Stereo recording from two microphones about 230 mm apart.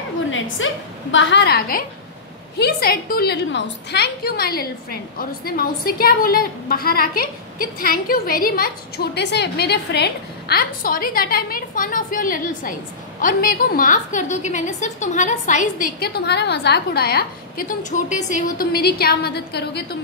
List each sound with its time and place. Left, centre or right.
0.6 s a woman's voice: left
1.1 s a woman's voice: left